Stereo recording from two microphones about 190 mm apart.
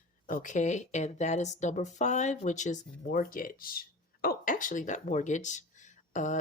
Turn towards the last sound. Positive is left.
turn(degrees=40)  # may be behind; listen again after turning